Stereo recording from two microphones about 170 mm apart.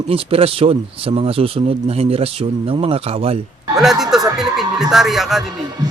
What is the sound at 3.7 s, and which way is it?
Speech, centre (ahead or behind).